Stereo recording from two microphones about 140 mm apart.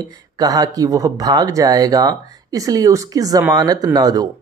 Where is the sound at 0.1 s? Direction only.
25° right (ahead or behind).